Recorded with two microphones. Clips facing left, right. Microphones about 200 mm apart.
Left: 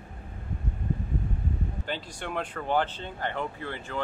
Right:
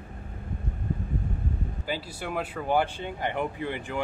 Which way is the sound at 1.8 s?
5° right (ahead or behind).